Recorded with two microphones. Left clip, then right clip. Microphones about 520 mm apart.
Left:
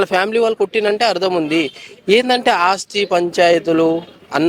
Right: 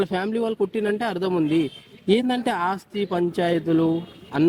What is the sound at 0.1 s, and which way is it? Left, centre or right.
Speech, left.